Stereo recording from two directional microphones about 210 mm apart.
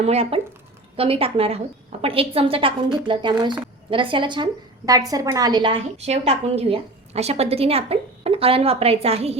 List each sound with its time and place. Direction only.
0.0 s a woman's voice: 30° right (ahead or behind)